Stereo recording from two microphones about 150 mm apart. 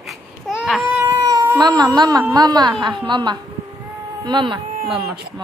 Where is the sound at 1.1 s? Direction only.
20° right (ahead or behind).